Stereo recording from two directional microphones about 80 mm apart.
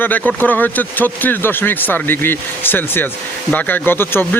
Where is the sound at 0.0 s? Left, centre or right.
Left.